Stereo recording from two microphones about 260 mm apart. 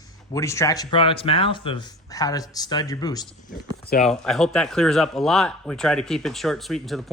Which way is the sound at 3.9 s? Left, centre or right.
Left.